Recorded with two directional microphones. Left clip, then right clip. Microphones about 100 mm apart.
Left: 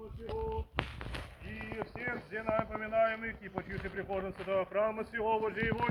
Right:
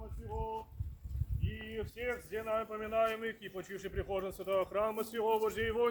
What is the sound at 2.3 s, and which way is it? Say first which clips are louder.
A man's voice: left 4 dB; 25° right (ahead or behind).